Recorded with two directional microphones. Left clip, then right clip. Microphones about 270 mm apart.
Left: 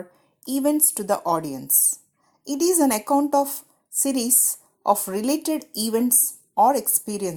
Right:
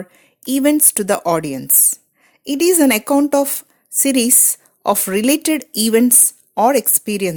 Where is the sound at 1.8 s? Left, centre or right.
Right.